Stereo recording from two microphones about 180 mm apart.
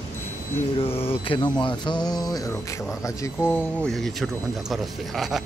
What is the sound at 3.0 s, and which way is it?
Speech, 15° left (ahead or behind).